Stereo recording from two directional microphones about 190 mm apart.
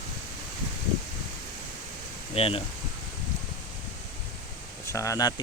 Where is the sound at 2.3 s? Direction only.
30° left (ahead or behind).